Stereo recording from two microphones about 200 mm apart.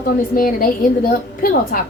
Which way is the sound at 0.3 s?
45° left (ahead or behind).